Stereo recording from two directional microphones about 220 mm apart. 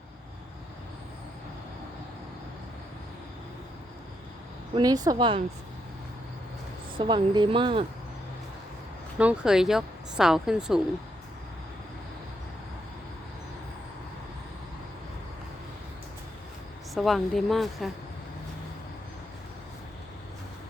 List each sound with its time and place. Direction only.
4.7 s a woman's voice: 15° right (ahead or behind)
6.9 s a woman's voice: 20° right (ahead or behind)
9.1 s speech: 5° right (ahead or behind)
16.9 s speech: centre (ahead or behind)